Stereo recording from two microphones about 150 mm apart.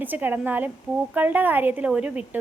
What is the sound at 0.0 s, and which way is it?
A woman's voice, 10° right (ahead or behind).